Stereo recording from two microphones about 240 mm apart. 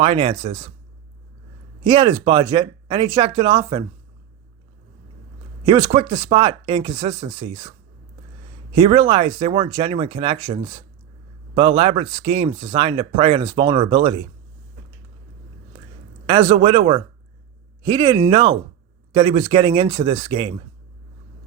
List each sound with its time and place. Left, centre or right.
0.0 s speech: right
1.8 s speech: right
5.6 s speech: right
8.7 s speech: right
16.2 s speech: right